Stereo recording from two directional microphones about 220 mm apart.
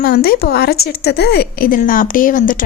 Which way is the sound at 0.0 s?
45° left (ahead or behind).